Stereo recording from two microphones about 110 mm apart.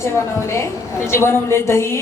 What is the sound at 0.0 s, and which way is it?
A woman's voice, 25° left (ahead or behind).